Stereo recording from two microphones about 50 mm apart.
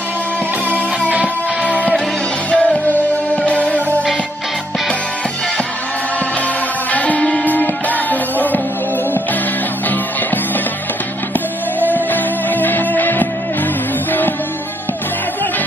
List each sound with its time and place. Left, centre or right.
0.7 s music: right
2.5 s music: left
6.9 s music: left
7.4 s music: left
11.8 s music: left